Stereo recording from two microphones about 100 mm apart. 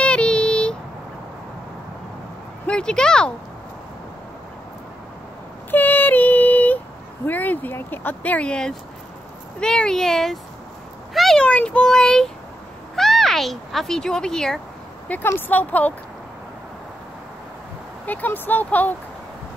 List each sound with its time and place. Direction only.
0.0 s a sound: 10° left (ahead or behind)
2.6 s speech: 10° left (ahead or behind)
5.7 s female singing: 20° left (ahead or behind)
7.2 s speech: 15° left (ahead or behind)
15.0 s speech: 20° left (ahead or behind)
18.0 s speech: 15° left (ahead or behind)